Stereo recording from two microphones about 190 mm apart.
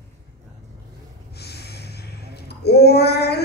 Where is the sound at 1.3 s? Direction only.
60° left (ahead or behind).